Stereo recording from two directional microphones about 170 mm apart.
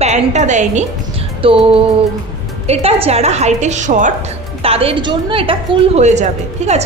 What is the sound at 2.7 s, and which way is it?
A woman's voice, 35° right (ahead or behind).